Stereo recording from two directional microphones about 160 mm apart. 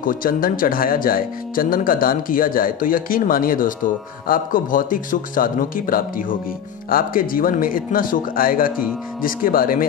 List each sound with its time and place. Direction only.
0.0 s speech: 60° left (ahead or behind)